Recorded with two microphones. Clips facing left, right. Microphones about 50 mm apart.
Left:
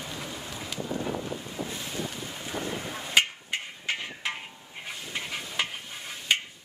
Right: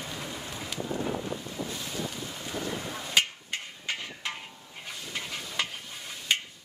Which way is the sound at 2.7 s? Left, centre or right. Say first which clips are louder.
Left 3 dB; centre.